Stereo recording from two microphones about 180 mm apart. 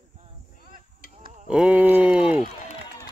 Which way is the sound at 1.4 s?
5° right (ahead or behind).